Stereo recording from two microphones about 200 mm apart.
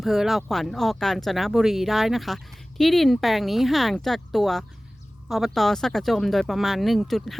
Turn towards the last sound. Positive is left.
turn(degrees=0)  # may be behind; listen again after turning